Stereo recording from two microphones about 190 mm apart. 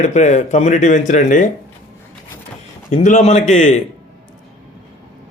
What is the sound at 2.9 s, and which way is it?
Speech, 40° left (ahead or behind).